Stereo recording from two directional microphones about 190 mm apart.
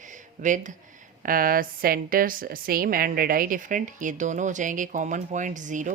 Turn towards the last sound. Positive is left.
turn(degrees=-40)  # may be behind; listen again after turning